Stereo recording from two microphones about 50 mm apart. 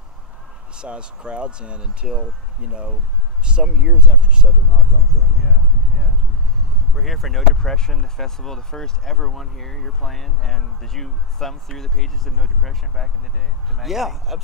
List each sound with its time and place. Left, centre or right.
0.7 s speech: right
5.4 s speech: centre